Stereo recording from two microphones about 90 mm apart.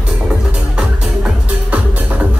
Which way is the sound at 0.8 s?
10° right (ahead or behind).